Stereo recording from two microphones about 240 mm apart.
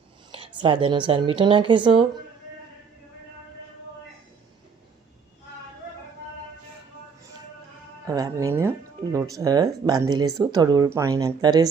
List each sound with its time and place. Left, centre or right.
0.6 s a woman's voice: centre
8.0 s speech: centre